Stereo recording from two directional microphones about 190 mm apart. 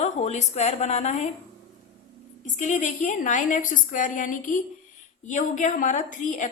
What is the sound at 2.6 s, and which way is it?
A woman's voice, 40° left (ahead or behind).